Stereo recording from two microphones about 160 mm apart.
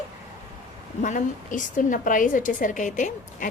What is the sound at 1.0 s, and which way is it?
A woman's voice, 50° left (ahead or behind).